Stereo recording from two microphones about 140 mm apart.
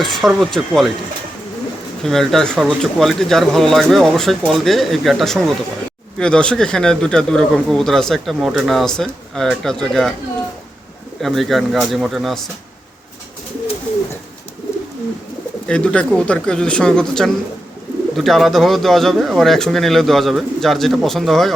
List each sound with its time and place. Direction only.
0.0 s speech: centre (ahead or behind)
2.0 s speech: centre (ahead or behind)
11.2 s speech: centre (ahead or behind)
15.6 s speech: 10° left (ahead or behind)